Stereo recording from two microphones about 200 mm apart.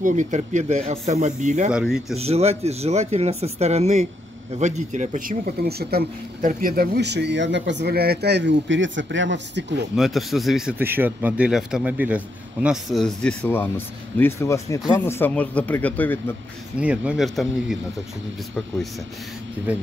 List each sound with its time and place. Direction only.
0.0 s speech: 35° right (ahead or behind)
1.7 s speech: 5° right (ahead or behind)
2.1 s speech: 30° right (ahead or behind); by 9.8 s 60° right (ahead or behind)
9.9 s speech: centre (ahead or behind)
16.8 s speech: 5° right (ahead or behind)